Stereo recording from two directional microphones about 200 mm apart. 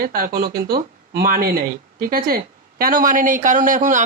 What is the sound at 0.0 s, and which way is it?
Speech, 50° right (ahead or behind).